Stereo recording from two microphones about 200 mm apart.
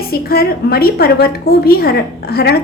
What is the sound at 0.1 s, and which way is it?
A woman's voice, 50° left (ahead or behind).